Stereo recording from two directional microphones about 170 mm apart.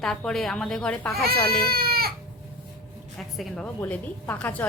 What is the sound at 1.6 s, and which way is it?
Baby cry, 65° right (ahead or behind).